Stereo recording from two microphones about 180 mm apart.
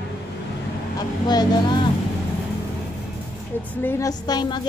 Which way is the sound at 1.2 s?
25° left (ahead or behind).